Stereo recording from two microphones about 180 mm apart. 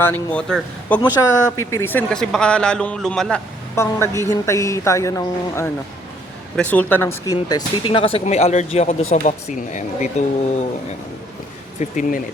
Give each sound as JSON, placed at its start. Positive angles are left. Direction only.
{"t": 0.0, "sound": "speech", "side_deg": 10}
{"t": 1.2, "sound": "speech", "side_deg": 15}
{"t": 3.8, "sound": "speech", "side_deg": 15}
{"t": 7.3, "sound": "speech", "side_deg": 25}
{"t": 11.8, "sound": "speech", "side_deg": 45}